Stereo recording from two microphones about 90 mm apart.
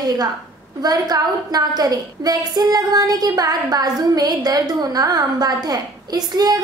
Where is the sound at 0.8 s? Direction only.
45° right (ahead or behind).